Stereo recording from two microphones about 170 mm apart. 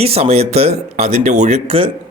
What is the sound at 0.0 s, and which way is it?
A man's voice, 35° right (ahead or behind).